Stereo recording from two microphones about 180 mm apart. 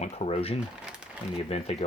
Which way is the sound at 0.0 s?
35° left (ahead or behind).